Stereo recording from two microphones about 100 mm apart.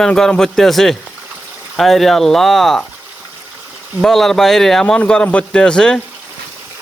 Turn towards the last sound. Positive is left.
turn(degrees=5)  # may be behind; listen again after turning